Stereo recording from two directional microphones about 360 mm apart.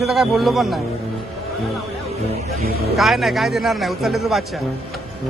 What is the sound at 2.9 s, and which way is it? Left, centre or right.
Speech, centre.